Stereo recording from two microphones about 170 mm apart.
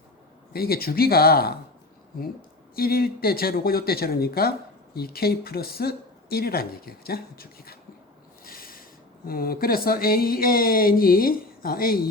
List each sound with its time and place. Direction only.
0.5 s speech: 65° left (ahead or behind)
2.7 s speech: 65° left (ahead or behind)
8.4 s a sound: 60° left (ahead or behind)
9.2 s speech: 60° left (ahead or behind)